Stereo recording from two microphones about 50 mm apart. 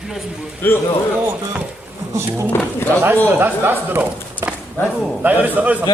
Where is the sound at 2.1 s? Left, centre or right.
Right.